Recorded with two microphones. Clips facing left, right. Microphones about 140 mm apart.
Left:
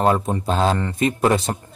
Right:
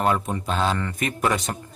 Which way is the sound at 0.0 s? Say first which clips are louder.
Left 4 dB; 30° left (ahead or behind).